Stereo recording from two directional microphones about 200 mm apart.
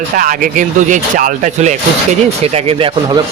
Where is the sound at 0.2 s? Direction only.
45° right (ahead or behind); by 2.9 s 30° right (ahead or behind).